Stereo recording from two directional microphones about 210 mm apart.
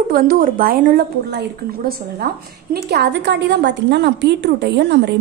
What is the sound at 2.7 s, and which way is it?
A woman's voice, 50° right (ahead or behind).